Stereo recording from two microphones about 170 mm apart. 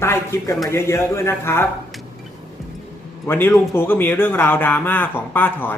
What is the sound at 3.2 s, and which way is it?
A man's voice, 15° left (ahead or behind).